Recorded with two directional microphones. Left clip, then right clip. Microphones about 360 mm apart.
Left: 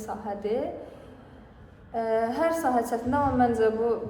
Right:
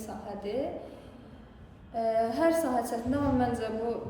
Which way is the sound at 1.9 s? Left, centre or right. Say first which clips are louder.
Left 2 dB; centre.